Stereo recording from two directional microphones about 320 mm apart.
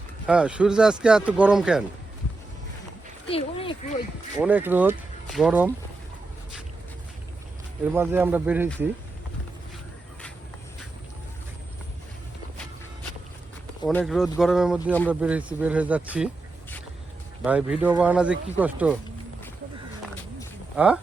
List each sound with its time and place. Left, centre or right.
0.3 s speech: centre
3.2 s speech: centre
4.4 s speech: centre
7.9 s speech: centre
13.8 s speech: centre
17.4 s speech: centre
20.7 s speech: centre